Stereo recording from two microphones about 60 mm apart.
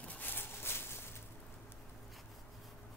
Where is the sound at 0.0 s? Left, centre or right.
Left.